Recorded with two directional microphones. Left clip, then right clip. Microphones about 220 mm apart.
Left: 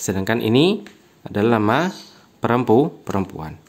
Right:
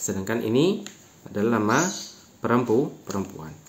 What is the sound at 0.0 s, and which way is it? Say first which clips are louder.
Speech: left 6 dB; 50° left (ahead or behind).